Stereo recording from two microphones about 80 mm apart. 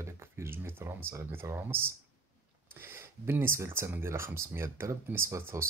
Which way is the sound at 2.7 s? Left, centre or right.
Right.